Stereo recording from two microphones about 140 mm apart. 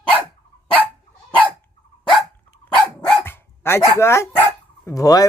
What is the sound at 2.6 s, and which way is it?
Dog, 5° left (ahead or behind).